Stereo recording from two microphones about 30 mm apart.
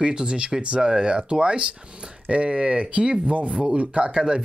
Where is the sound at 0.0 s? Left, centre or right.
Right.